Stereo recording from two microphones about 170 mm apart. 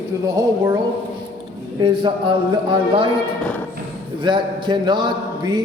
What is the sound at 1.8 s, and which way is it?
A man's voice, 30° right (ahead or behind).